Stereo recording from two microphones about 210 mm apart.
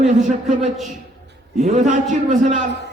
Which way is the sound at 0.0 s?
35° right (ahead or behind).